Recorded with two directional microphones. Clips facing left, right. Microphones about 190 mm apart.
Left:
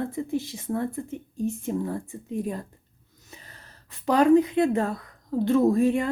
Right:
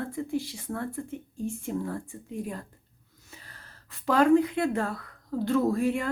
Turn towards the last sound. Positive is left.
turn(degrees=20)  # may be behind; listen again after turning